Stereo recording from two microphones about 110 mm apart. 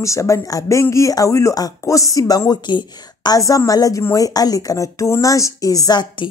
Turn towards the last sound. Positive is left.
turn(degrees=45)  # may be behind; listen again after turning